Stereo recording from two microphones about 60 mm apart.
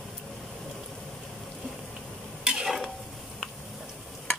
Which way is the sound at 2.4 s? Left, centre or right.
Centre.